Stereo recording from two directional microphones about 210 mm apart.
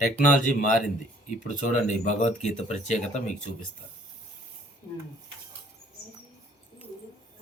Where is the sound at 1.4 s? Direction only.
40° left (ahead or behind).